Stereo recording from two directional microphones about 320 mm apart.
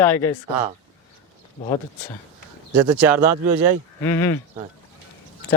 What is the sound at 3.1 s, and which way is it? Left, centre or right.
Speech, right.